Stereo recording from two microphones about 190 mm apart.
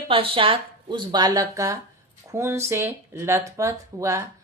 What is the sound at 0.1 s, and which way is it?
Speech, 30° right (ahead or behind).